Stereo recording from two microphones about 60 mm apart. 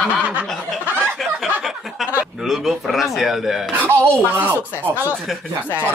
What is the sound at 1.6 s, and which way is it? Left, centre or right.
Chuckle, centre.